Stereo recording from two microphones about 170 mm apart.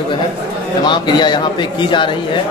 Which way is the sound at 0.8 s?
25° left (ahead or behind).